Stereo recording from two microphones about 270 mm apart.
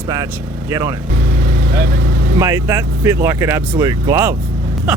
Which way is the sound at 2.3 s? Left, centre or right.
Centre.